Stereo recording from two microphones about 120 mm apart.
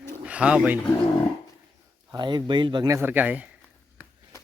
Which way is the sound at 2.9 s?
20° right (ahead or behind).